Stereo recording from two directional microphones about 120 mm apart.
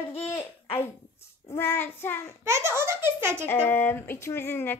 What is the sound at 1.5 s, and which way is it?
Speech, 20° left (ahead or behind).